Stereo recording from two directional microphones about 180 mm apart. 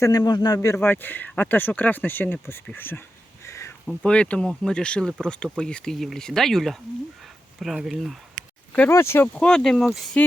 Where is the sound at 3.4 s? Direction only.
15° left (ahead or behind).